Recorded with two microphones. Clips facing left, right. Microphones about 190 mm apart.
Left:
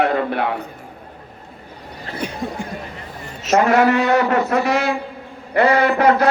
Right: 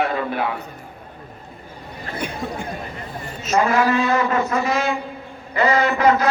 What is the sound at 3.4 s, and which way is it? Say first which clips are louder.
A woman's voice: left 4 dB; 75° left (ahead or behind).